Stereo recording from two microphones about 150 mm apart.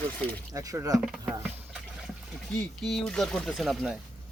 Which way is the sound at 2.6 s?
Centre (ahead or behind).